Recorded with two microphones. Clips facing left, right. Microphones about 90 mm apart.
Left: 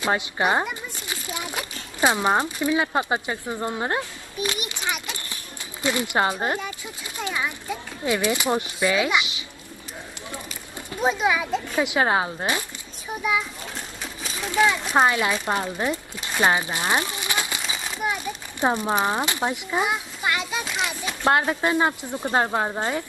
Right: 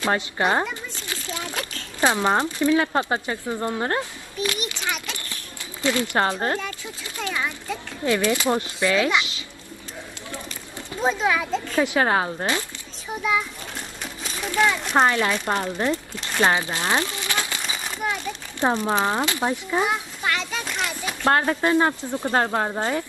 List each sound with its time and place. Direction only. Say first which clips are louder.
0.0 s a child's voice: even; 15° left (ahead or behind)
11.0 s speech: even; 10° left (ahead or behind)
14.0 s a sound: right 1 dB; centre (ahead or behind)
14.5 s speech: even; 15° left (ahead or behind)
17.6 s a sound: even; centre (ahead or behind)
18.6 s a child's voice: right 1 dB; 15° left (ahead or behind)
21.2 s speech: right 1 dB; 15° left (ahead or behind)